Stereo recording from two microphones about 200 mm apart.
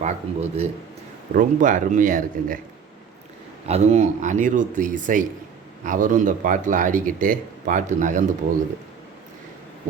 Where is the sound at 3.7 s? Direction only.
35° right (ahead or behind).